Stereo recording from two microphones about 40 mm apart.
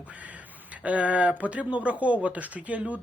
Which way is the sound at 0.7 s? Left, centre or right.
Right.